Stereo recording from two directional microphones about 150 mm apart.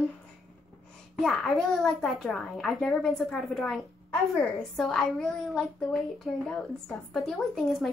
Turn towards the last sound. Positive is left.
turn(degrees=0)  # may be behind; listen again after turning